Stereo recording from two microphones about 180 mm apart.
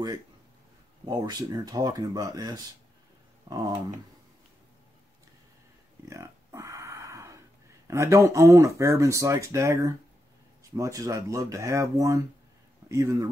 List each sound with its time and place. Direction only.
1.0 s speech: 20° right (ahead or behind)
6.0 s a sound: 15° right (ahead or behind)
7.9 s speech: 15° right (ahead or behind)